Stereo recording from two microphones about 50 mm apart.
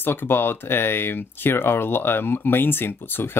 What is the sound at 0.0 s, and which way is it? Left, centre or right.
Speech, left.